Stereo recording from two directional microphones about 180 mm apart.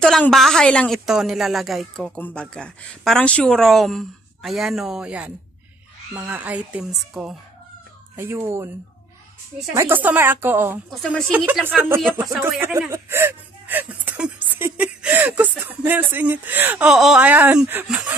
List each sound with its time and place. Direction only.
0.0 s a woman's voice: centre (ahead or behind)
8.2 s speech: 15° right (ahead or behind)
9.8 s speech: 10° right (ahead or behind)
10.9 s a woman's voice: centre (ahead or behind)
11.3 s a woman's voice: 10° right (ahead or behind)